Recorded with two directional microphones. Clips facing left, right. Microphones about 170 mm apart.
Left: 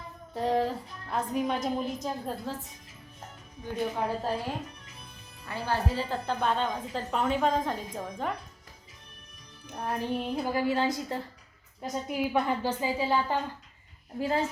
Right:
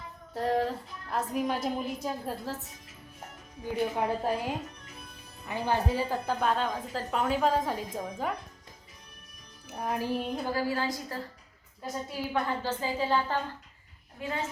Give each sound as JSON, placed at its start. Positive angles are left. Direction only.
{"t": 0.3, "sound": "a woman's voice", "side_deg": 0}
{"t": 3.7, "sound": "a woman's voice", "side_deg": -10}
{"t": 9.6, "sound": "music", "side_deg": -5}
{"t": 10.3, "sound": "a woman's voice", "side_deg": 15}
{"t": 14.2, "sound": "a child's voice", "side_deg": 35}